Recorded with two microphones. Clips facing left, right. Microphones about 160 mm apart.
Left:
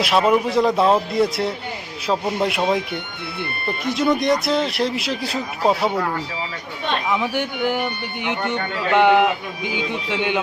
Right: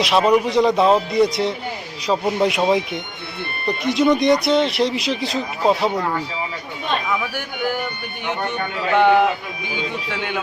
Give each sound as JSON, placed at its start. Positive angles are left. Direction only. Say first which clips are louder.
{"t": 0.0, "sound": "speech", "louder": "right 1 dB", "side_deg": 0}
{"t": 7.1, "sound": "speech", "louder": "left 3 dB", "side_deg": 20}